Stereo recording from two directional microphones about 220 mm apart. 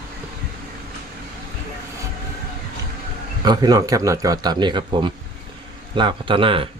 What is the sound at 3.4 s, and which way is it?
Speech, 15° right (ahead or behind).